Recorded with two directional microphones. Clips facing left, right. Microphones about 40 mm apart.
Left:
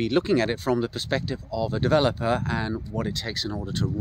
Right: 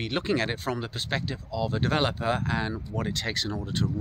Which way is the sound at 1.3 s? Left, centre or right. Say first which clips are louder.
Left 2 dB; right.